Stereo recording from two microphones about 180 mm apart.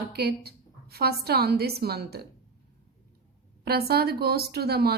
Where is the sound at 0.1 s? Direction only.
60° right (ahead or behind).